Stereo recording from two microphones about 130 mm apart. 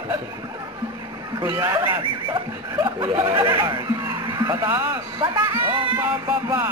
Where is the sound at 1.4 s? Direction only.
20° right (ahead or behind).